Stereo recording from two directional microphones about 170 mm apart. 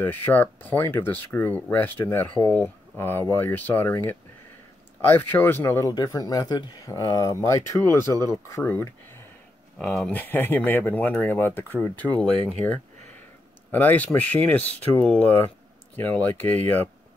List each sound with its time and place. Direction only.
0.0 s speech: 10° left (ahead or behind)
9.8 s speech: 5° left (ahead or behind)
13.7 s speech: 10° left (ahead or behind)